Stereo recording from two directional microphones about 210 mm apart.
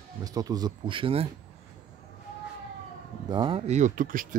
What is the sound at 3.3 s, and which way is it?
Speech, 25° right (ahead or behind).